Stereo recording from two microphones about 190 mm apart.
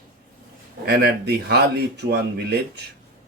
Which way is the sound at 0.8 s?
55° right (ahead or behind).